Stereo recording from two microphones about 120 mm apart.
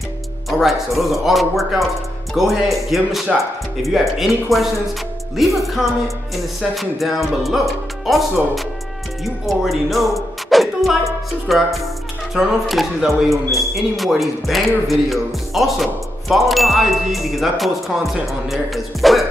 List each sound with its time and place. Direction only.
0.5 s speech: centre (ahead or behind)